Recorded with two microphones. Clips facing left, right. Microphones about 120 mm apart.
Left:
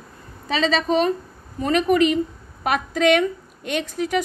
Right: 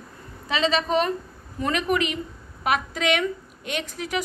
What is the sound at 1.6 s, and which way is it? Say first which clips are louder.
A woman's voice: left 6 dB; 35° left (ahead or behind).